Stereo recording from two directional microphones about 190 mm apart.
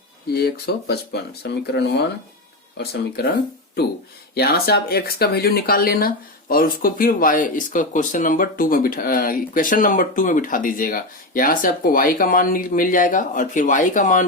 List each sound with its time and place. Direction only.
0.3 s speech: 55° left (ahead or behind)
4.4 s speech: 55° left (ahead or behind)